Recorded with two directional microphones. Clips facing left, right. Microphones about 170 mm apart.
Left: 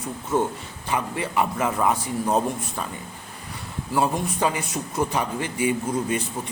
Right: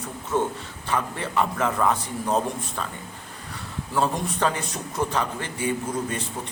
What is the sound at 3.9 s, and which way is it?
A man's voice, 10° left (ahead or behind).